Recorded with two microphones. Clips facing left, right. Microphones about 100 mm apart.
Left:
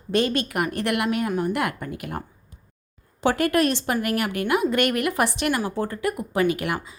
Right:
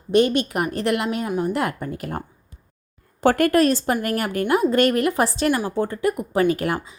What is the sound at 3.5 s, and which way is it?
A woman's voice, 40° right (ahead or behind).